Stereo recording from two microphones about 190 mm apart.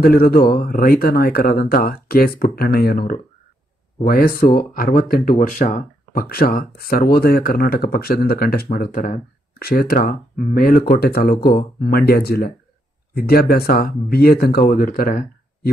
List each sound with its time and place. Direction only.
0.0 s speech: 50° left (ahead or behind)